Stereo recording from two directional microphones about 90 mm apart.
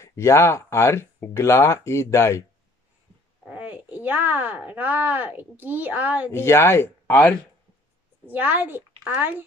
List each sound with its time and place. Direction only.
0.0 s speech: 30° left (ahead or behind)
3.4 s speech: 15° right (ahead or behind)
6.3 s speech: 30° left (ahead or behind)
8.3 s a child's voice: 20° right (ahead or behind)